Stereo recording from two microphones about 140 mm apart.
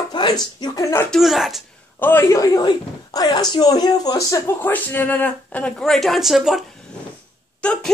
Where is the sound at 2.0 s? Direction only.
20° left (ahead or behind); by 6.6 s centre (ahead or behind).